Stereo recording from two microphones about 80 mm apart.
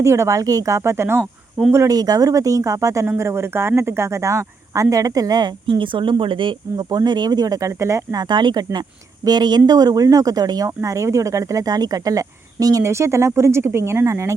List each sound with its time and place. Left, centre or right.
0.0 s speech: right
1.6 s speech: centre
1.9 s speech: right
5.6 s speech: right
8.1 s speech: right
10.8 s a woman's voice: right
12.8 s speech: right